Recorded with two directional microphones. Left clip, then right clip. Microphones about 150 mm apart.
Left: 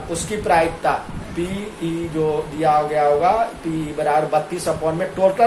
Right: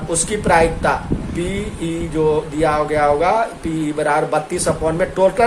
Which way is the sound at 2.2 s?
90° right.